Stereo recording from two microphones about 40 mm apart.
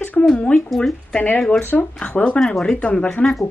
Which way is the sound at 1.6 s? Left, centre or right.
Left.